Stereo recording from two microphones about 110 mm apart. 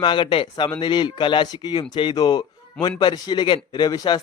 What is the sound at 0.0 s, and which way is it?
A man's voice, 50° left (ahead or behind).